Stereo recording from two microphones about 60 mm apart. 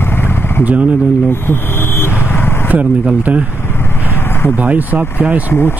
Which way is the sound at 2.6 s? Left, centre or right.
Right.